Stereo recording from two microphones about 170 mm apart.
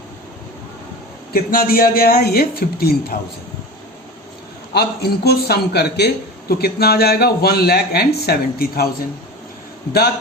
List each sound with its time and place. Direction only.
1.3 s speech: 60° left (ahead or behind)
4.7 s a man's voice: 70° left (ahead or behind)